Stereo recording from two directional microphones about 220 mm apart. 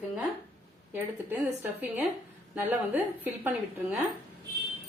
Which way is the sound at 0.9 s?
10° right (ahead or behind).